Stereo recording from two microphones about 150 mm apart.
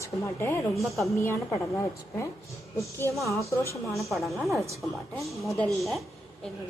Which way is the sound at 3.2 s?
20° left (ahead or behind).